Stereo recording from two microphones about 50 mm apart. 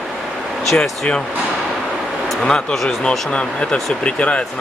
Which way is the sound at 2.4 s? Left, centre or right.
Centre.